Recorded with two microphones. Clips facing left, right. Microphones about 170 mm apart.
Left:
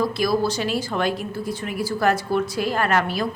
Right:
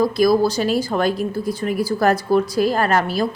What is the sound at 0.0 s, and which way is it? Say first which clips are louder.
A woman's voice: right 6 dB; 40° right (ahead or behind).